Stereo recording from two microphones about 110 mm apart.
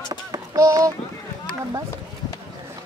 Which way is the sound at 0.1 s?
40° right (ahead or behind).